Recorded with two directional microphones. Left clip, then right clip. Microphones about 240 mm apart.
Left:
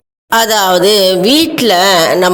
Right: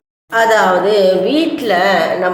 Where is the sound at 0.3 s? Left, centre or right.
Left.